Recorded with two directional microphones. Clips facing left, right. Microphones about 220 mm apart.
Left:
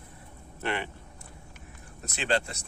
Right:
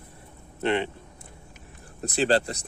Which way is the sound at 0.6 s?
20° right (ahead or behind).